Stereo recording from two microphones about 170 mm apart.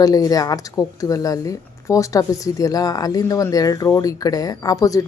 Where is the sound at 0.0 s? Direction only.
20° left (ahead or behind).